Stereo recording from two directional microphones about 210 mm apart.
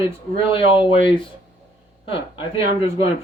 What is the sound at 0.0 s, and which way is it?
Speech, 25° left (ahead or behind).